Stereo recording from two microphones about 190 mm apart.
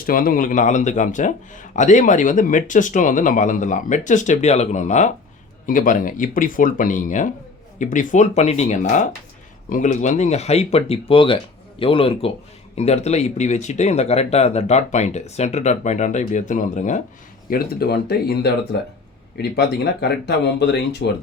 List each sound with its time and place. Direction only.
0.0 s a man's voice: 50° left (ahead or behind)
17.5 s speech: 55° left (ahead or behind)